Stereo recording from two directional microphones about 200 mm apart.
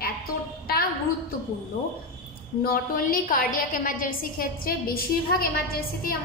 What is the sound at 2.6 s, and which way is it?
A woman's voice, 45° left (ahead or behind).